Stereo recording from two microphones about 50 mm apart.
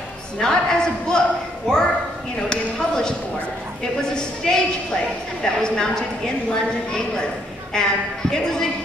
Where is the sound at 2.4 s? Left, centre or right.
Centre.